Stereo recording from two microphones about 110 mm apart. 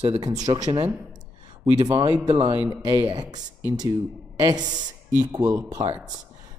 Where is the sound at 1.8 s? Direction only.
55° right (ahead or behind).